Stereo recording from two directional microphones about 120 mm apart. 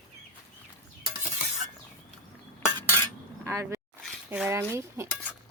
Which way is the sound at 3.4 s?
20° right (ahead or behind).